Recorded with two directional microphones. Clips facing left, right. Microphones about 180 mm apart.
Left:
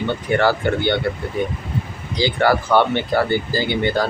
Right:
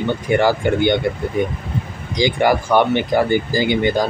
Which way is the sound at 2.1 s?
15° right (ahead or behind).